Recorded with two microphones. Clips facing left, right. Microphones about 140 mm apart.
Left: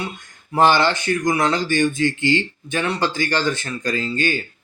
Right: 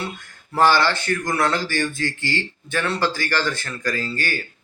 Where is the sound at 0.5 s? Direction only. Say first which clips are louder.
Left 2 dB; 20° left (ahead or behind).